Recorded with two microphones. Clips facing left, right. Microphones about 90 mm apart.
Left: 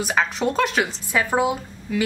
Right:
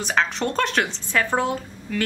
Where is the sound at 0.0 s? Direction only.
5° left (ahead or behind).